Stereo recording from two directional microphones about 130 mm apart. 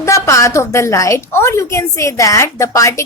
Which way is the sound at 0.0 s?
25° left (ahead or behind).